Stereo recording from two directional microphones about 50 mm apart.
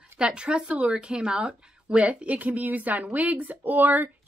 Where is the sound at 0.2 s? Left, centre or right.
Centre.